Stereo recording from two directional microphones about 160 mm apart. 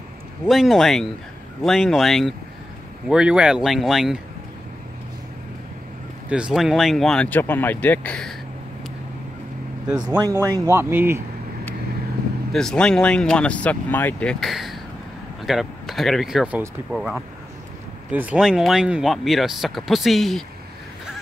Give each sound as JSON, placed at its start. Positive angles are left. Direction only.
{"t": 0.5, "sound": "speech", "side_deg": 0}
{"t": 6.2, "sound": "speech", "side_deg": -5}
{"t": 10.1, "sound": "speech", "side_deg": -20}
{"t": 12.5, "sound": "speech", "side_deg": 5}
{"t": 14.4, "sound": "speech", "side_deg": 0}